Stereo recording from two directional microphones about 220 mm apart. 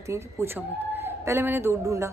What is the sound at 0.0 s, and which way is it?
A woman's voice, 15° right (ahead or behind).